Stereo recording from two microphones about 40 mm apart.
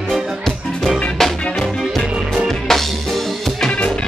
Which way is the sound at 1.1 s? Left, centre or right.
Centre.